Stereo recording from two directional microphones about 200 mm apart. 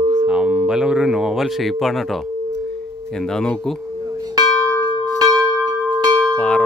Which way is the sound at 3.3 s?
Centre (ahead or behind).